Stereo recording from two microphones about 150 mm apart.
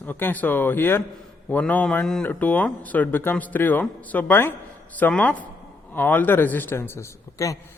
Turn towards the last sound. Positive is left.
turn(degrees=20)  # may be behind; listen again after turning